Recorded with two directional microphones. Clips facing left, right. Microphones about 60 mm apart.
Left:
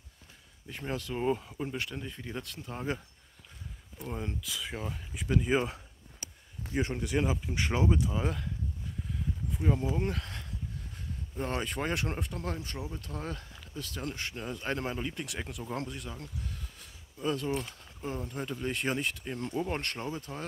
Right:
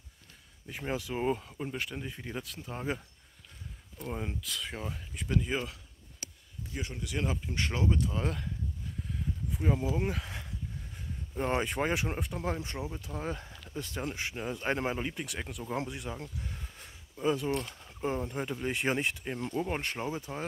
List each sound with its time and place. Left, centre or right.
0.8 s speech: centre
4.0 s speech: centre
5.3 s speech: centre
6.7 s speech: left
7.2 s speech: centre
8.0 s speech: centre
9.5 s speech: centre
11.3 s speech: right
12.4 s speech: centre
13.7 s speech: right
15.1 s speech: centre
15.7 s speech: centre
19.5 s speech: centre